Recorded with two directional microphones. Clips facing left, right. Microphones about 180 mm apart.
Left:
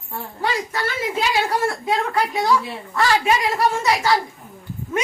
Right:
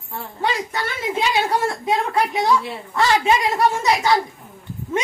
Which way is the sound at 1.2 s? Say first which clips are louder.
Right 1 dB; 25° right (ahead or behind).